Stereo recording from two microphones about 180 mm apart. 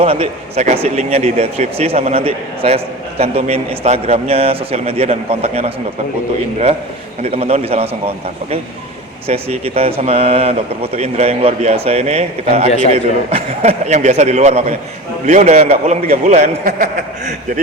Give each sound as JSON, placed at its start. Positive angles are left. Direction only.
{"t": 0.0, "sound": "speech", "side_deg": -30}
{"t": 7.2, "sound": "speech", "side_deg": -35}